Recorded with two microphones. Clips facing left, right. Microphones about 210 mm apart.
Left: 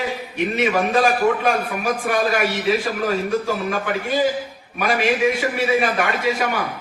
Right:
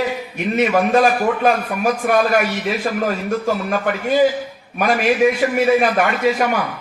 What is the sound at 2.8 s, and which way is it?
A man's voice, 45° right (ahead or behind).